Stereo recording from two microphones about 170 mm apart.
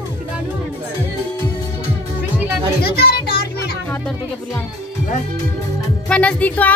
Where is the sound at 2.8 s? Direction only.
65° left (ahead or behind).